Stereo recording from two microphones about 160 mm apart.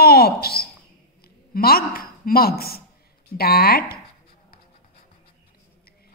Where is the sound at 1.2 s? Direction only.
70° left (ahead or behind).